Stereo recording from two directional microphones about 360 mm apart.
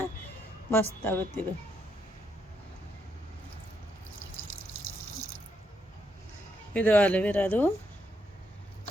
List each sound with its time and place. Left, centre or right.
0.7 s speech: centre
6.7 s speech: centre